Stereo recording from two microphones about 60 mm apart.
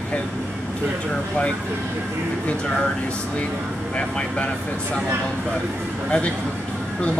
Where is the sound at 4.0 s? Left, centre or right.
Centre.